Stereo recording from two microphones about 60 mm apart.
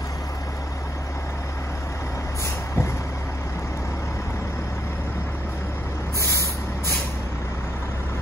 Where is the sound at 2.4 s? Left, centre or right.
Left.